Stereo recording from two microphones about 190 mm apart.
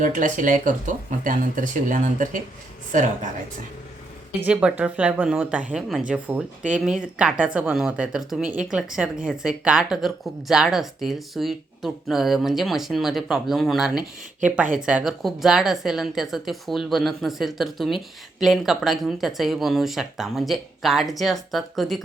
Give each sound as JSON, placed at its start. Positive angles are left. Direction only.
{"t": 0.0, "sound": "speech", "side_deg": -40}
{"t": 4.4, "sound": "speech", "side_deg": -10}